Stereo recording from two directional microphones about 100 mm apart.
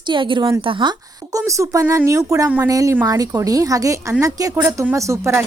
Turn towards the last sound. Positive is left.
turn(degrees=-30)  # may be behind; listen again after turning